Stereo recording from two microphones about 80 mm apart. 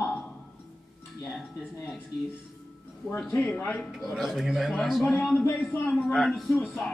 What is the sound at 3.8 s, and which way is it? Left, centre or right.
Speech, centre.